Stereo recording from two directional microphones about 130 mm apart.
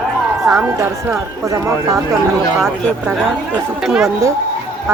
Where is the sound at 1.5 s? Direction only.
25° right (ahead or behind).